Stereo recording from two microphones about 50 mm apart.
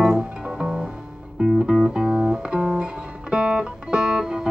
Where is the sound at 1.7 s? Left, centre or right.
Centre.